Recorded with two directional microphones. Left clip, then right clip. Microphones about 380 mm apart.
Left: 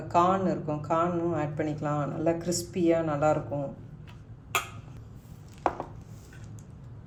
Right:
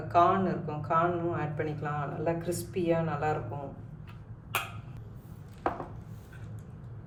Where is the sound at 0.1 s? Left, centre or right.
Centre.